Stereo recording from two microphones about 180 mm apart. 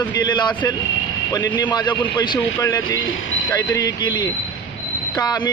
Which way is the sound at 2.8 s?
90° left.